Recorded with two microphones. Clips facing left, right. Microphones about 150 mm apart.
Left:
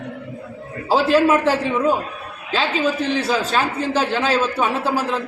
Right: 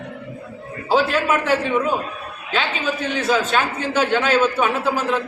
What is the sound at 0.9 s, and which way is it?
A man's voice, 30° left (ahead or behind).